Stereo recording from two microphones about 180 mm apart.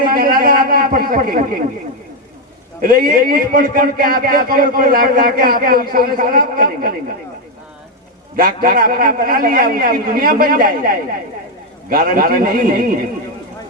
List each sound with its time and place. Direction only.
0.0 s a sound: 55° right (ahead or behind)
2.8 s a man's voice: 55° right (ahead or behind)
8.4 s a man's voice: 55° right (ahead or behind)